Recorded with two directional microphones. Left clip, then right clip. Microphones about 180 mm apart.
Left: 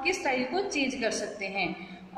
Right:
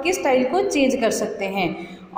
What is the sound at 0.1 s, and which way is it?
A woman's voice, 30° right (ahead or behind).